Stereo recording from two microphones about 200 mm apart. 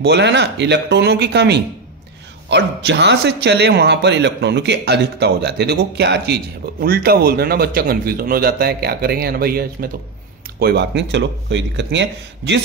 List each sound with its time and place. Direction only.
0.0 s a man's voice: 60° right (ahead or behind)